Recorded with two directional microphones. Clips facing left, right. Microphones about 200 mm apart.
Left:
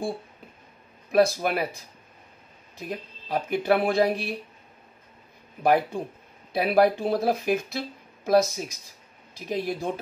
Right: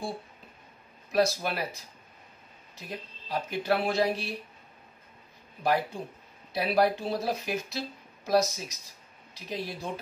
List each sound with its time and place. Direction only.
1.1 s speech: 55° left (ahead or behind)
3.3 s speech: 55° left (ahead or behind)
5.6 s speech: 55° left (ahead or behind)